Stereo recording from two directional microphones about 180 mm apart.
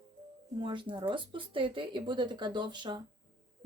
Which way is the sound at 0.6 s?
25° right (ahead or behind).